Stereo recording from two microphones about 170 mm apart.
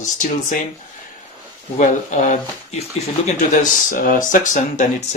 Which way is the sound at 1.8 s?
45° left (ahead or behind).